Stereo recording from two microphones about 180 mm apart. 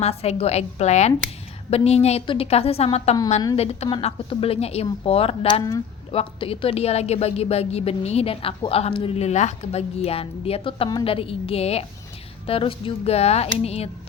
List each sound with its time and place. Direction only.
0.0 s a woman's voice: 35° left (ahead or behind)